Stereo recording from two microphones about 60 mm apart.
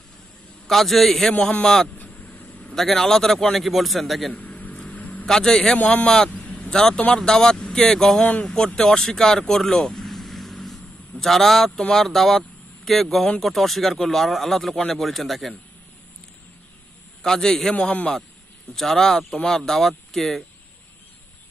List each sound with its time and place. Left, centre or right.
0.7 s speech: centre
2.0 s vehicle: left
2.7 s speech: centre
4.3 s a sound: left
5.2 s speech: centre
5.8 s a man's voice: left
6.0 s speech: centre
6.3 s vehicle: left
7.2 s speech: centre
17.2 s speech: centre
18.8 s speech: centre